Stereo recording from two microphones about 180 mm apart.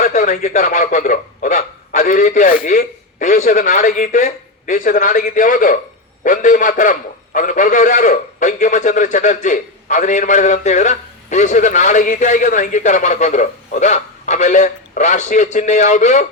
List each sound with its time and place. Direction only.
0.0 s a man's voice: 45° left (ahead or behind)